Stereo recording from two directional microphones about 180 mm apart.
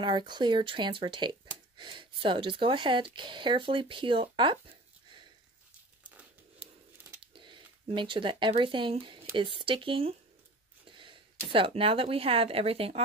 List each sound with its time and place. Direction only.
0.0 s speech: 25° right (ahead or behind)
6.0 s crumpling: 10° right (ahead or behind)
7.3 s speech: 25° right (ahead or behind)